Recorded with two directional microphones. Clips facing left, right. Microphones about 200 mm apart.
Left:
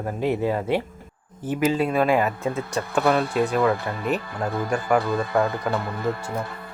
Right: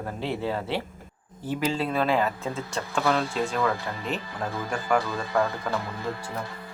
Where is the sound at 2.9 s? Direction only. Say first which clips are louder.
Left 5 dB; 60° left (ahead or behind).